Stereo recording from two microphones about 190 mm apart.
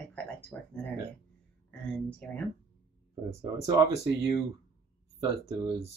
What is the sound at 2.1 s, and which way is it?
Speech, 5° left (ahead or behind).